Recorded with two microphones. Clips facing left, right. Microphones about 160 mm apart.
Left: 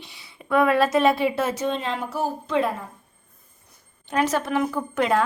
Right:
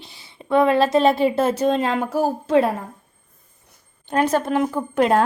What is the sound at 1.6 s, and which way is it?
Speech, 45° right (ahead or behind).